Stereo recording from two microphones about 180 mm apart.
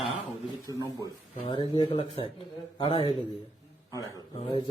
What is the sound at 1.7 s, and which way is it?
Speech, 30° left (ahead or behind).